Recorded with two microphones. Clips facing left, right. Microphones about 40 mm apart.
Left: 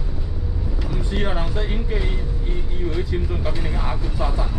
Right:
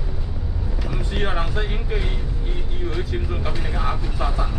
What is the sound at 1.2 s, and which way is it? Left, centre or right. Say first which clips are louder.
Music: right 3 dB; right.